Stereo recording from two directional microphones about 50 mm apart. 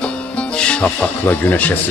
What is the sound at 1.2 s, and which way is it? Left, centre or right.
Speech, left.